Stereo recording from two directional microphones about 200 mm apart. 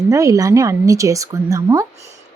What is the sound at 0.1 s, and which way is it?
Speech, 15° right (ahead or behind).